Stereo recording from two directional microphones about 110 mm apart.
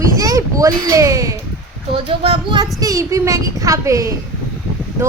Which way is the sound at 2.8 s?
30° right (ahead or behind).